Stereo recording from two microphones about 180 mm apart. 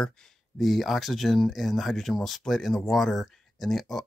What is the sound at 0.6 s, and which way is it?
Speech, centre (ahead or behind).